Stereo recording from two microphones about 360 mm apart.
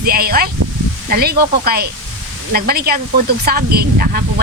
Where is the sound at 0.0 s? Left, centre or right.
Right.